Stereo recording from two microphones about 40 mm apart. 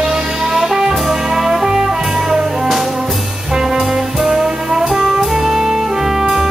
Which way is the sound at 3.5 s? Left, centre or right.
Centre.